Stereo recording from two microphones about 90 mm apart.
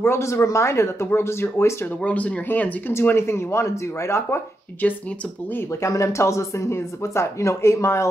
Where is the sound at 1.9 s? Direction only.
15° left (ahead or behind).